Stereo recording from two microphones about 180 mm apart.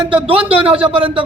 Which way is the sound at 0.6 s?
30° right (ahead or behind).